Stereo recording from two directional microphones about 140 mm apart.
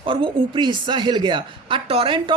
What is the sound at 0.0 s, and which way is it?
A woman's voice, 40° right (ahead or behind).